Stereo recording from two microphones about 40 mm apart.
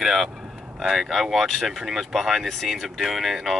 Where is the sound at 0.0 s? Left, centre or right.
Centre.